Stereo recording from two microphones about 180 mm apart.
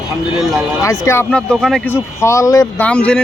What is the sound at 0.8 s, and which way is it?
Speech, 15° left (ahead or behind).